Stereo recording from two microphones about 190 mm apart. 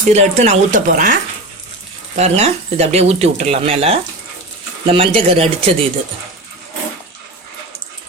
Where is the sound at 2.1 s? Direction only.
35° right (ahead or behind).